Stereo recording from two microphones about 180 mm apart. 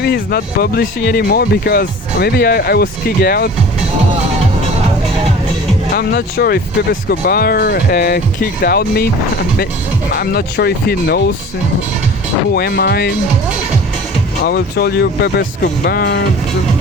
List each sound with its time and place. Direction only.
0.0 s speech: 60° left (ahead or behind)
6.0 s speech: 60° left (ahead or behind)
12.5 s speech: 60° left (ahead or behind)
14.4 s speech: 60° left (ahead or behind)